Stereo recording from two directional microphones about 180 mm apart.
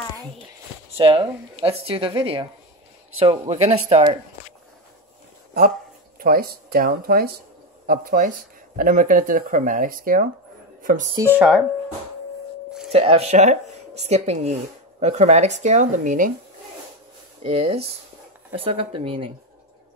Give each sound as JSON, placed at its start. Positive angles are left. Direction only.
{"t": 0.9, "sound": "speech", "side_deg": -30}
{"t": 6.1, "sound": "speech", "side_deg": -55}
{"t": 11.1, "sound": "speech", "side_deg": -10}
{"t": 12.9, "sound": "speech", "side_deg": -35}
{"t": 17.4, "sound": "speech", "side_deg": -30}